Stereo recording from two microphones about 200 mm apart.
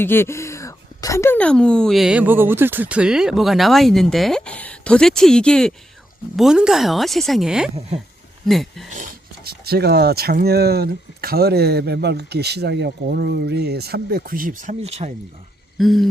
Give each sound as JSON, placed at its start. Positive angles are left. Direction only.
{"t": 0.0, "sound": "speech", "side_deg": 10}
{"t": 8.9, "sound": "speech", "side_deg": -45}
{"t": 15.8, "sound": "speech", "side_deg": 0}